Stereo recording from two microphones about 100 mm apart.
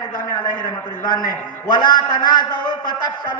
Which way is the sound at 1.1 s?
45° left (ahead or behind).